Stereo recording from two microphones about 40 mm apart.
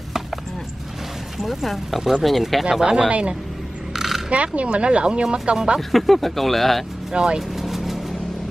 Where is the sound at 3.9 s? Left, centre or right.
Centre.